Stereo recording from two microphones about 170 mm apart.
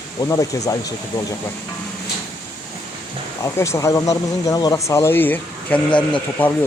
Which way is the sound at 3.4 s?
15° left (ahead or behind).